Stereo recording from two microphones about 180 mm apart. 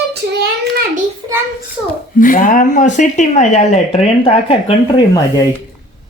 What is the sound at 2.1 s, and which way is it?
Speech, 50° left (ahead or behind).